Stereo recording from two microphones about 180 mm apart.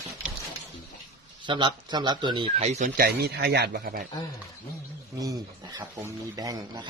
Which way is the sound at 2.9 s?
60° right (ahead or behind).